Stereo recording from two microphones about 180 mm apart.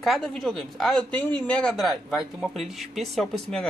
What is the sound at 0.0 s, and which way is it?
Speech, centre (ahead or behind).